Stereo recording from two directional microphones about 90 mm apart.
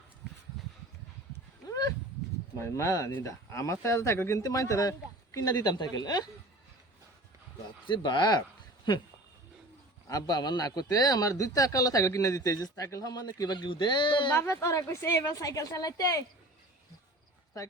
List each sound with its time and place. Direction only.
2.6 s speech: 30° left (ahead or behind)
7.9 s speech: 60° left (ahead or behind)
10.1 s a man's voice: 45° left (ahead or behind); by 14.3 s 65° left (ahead or behind)
14.3 s speech: 30° left (ahead or behind)